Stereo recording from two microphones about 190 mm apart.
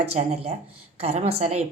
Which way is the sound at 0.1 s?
35° right (ahead or behind).